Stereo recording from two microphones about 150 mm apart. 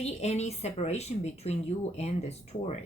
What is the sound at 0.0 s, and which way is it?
A woman's voice, 45° left (ahead or behind).